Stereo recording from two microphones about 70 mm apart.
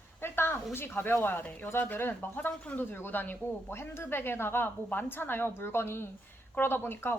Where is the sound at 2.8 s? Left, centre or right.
Left.